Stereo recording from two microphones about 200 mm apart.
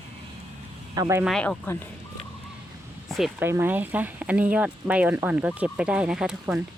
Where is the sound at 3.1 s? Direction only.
Centre (ahead or behind).